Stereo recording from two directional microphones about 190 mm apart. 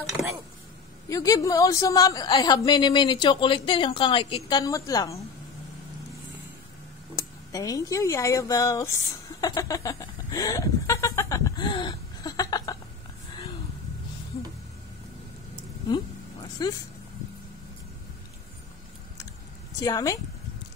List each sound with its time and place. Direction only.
1.0 s a woman's voice: 15° left (ahead or behind)
7.2 s speech: 20° left (ahead or behind)
9.4 s a sound: 20° left (ahead or behind)
16.6 s a woman's voice: 20° left (ahead or behind)
19.8 s a woman's voice: 20° left (ahead or behind)